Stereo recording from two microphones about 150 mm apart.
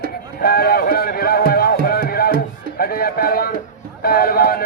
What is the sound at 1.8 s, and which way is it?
Music, 85° left.